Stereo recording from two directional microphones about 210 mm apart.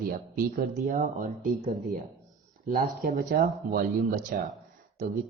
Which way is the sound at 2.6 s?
45° right (ahead or behind).